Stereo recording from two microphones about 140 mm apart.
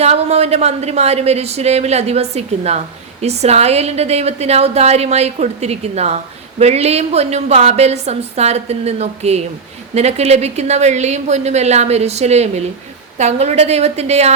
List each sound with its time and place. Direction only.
0.0 s a woman's voice: 50° right (ahead or behind)